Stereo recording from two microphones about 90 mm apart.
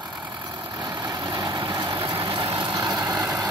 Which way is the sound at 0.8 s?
50° right (ahead or behind).